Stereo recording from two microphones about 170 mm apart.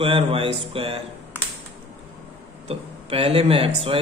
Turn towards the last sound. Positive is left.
turn(degrees=-35)  # may be behind; listen again after turning